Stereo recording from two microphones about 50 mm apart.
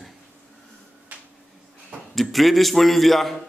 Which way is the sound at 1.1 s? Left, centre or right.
Right.